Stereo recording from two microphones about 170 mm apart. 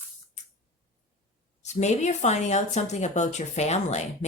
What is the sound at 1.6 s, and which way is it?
Speech, 40° left (ahead or behind).